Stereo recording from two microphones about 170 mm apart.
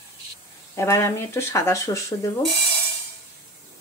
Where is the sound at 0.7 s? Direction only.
15° left (ahead or behind).